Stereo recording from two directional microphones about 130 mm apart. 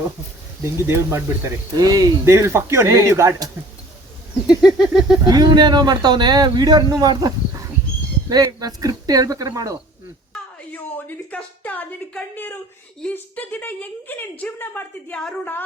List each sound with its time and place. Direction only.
0.6 s speech: 20° right (ahead or behind)
4.4 s a sound: 5° right (ahead or behind)
5.2 s speech: 30° right (ahead or behind)
10.7 s a woman's voice: 15° left (ahead or behind)